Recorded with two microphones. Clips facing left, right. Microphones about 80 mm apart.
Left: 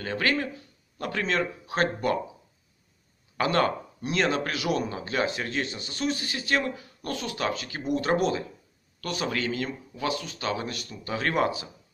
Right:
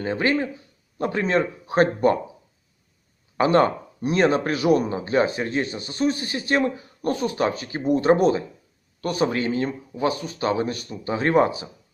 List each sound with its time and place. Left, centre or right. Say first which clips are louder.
0.0 s speech: right 5 dB; right
3.3 s speech: right 6 dB; right